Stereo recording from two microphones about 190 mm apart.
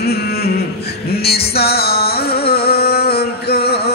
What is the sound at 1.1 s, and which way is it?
Music, 55° left (ahead or behind).